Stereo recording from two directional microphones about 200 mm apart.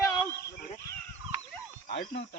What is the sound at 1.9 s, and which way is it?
Speech, 45° left (ahead or behind).